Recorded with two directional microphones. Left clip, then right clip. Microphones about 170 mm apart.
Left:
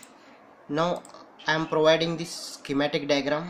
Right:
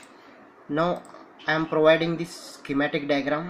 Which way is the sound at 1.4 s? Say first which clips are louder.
Right 2 dB; 10° left (ahead or behind).